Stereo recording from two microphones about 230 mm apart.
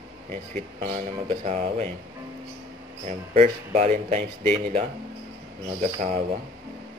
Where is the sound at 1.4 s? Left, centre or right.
Right.